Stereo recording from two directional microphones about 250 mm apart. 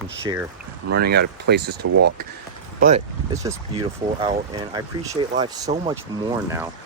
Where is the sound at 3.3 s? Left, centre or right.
Centre.